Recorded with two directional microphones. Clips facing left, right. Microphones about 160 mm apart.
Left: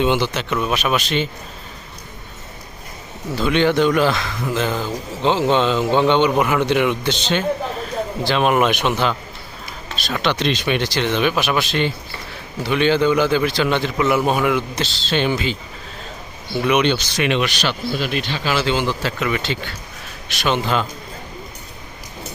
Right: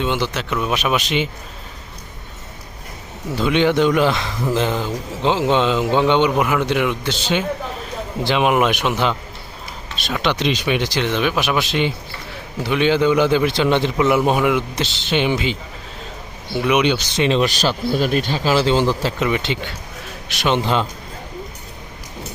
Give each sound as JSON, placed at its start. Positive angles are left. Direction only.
{"t": 0.0, "sound": "a man's voice", "side_deg": 0}
{"t": 0.7, "sound": "a man's voice", "side_deg": -15}
{"t": 3.3, "sound": "a man's voice", "side_deg": -15}
{"t": 5.2, "sound": "a man's voice", "side_deg": -10}
{"t": 10.1, "sound": "a man's voice", "side_deg": -10}
{"t": 16.6, "sound": "a man's voice", "side_deg": -10}
{"t": 17.2, "sound": "speech", "side_deg": -30}